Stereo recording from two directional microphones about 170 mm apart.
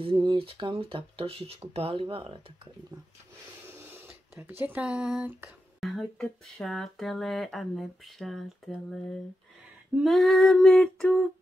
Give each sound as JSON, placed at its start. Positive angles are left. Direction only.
{"t": 0.0, "sound": "speech", "side_deg": -30}
{"t": 3.6, "sound": "speech", "side_deg": -15}
{"t": 9.9, "sound": "female singing", "side_deg": 0}